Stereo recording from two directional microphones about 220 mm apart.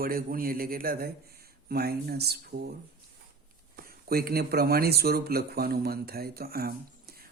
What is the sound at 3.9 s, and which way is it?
Speech, 45° right (ahead or behind).